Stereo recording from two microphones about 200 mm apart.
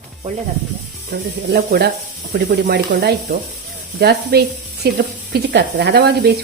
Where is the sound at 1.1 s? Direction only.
50° right (ahead or behind).